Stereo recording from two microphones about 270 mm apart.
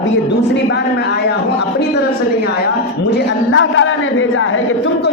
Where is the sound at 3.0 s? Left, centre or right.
Left.